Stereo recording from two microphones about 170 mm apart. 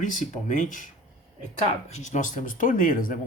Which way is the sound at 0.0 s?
50° left (ahead or behind).